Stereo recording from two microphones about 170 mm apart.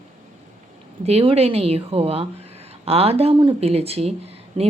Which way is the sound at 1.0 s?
35° right (ahead or behind).